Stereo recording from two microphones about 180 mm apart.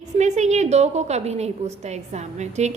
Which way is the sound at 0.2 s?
40° right (ahead or behind).